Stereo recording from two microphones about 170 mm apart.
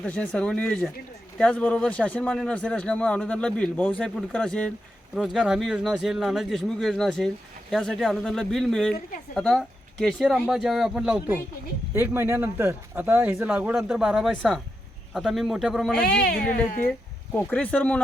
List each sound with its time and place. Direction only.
0.0 s speech: 5° left (ahead or behind)
16.2 s speech: 60° left (ahead or behind)
17.3 s speech: 10° left (ahead or behind)